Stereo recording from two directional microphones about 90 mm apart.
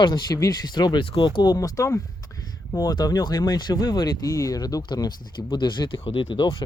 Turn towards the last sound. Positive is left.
turn(degrees=75)  # may be behind; listen again after turning